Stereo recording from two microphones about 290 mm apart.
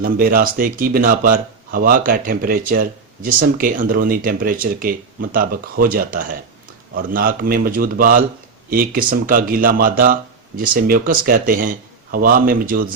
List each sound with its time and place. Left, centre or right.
0.0 s speech: right